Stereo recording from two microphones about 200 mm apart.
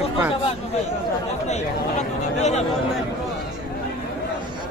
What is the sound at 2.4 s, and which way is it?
Speech, 35° left (ahead or behind).